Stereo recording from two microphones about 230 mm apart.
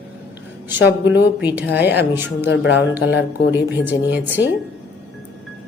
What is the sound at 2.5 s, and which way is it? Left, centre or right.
Speech, left.